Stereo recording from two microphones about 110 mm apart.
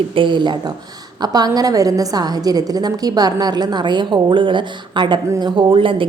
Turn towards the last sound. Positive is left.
turn(degrees=-50)  # may be behind; listen again after turning